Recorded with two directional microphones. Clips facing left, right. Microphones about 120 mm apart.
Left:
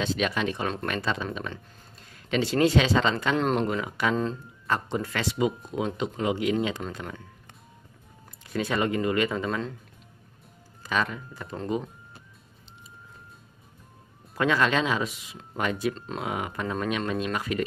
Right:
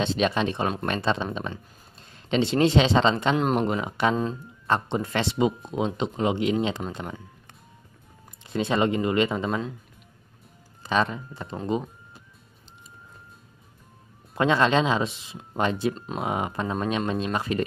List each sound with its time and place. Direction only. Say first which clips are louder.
0.0 s speech: right 3 dB; 25° right (ahead or behind)
3.3 s speech: right 1 dB; 10° right (ahead or behind)
3.6 s speech: right 3 dB; 25° right (ahead or behind)
8.5 s speech: right 3 dB; 25° right (ahead or behind)
10.8 s speech: right 4 dB; 25° right (ahead or behind)
14.3 s speech: right 3 dB; 25° right (ahead or behind)